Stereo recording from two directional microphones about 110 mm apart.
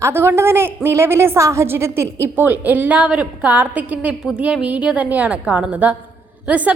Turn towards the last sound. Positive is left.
turn(degrees=-10)  # may be behind; listen again after turning